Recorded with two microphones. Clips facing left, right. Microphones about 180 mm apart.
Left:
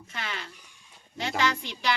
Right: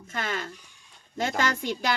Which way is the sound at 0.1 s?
45° right (ahead or behind).